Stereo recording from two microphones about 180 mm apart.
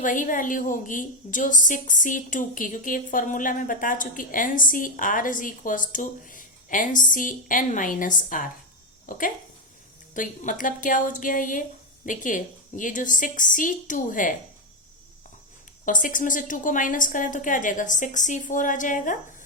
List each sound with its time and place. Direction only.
0.0 s a woman's voice: 45° left (ahead or behind)
15.9 s a woman's voice: 45° left (ahead or behind)